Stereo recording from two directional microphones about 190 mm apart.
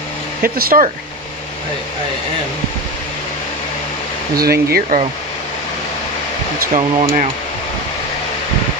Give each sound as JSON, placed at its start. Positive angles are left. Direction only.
{"t": 0.4, "sound": "speech", "side_deg": -50}
{"t": 4.4, "sound": "speech", "side_deg": -55}
{"t": 6.7, "sound": "speech", "side_deg": -40}